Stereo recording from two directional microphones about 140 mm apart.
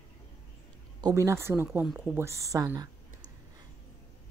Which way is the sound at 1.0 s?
20° right (ahead or behind).